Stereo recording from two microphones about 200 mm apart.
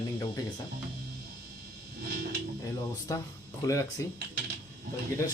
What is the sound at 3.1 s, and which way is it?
Speech, 15° left (ahead or behind).